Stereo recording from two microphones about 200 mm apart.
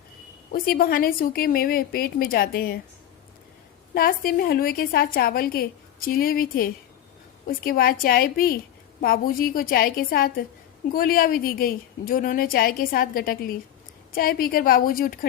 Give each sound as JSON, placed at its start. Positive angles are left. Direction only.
{"t": 0.5, "sound": "a woman's voice", "side_deg": 45}
{"t": 3.9, "sound": "a woman's voice", "side_deg": 45}